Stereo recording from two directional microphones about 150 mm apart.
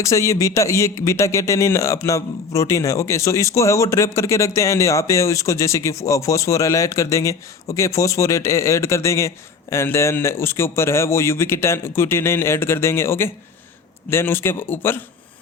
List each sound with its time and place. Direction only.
0.0 s a man's voice: 20° left (ahead or behind)